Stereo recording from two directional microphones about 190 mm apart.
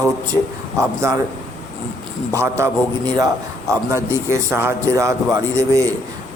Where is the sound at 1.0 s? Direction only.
15° right (ahead or behind).